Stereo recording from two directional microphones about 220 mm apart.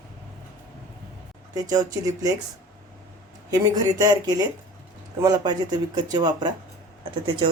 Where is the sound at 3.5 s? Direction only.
15° right (ahead or behind).